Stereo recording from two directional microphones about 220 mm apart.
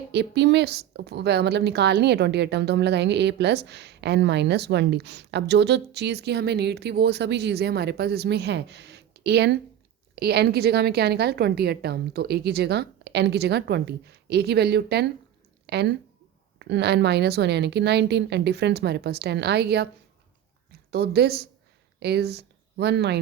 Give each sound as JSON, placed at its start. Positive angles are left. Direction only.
{"t": 0.1, "sound": "speech", "side_deg": -50}
{"t": 20.9, "sound": "speech", "side_deg": -45}